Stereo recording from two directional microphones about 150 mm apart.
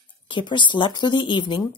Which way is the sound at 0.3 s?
30° left (ahead or behind).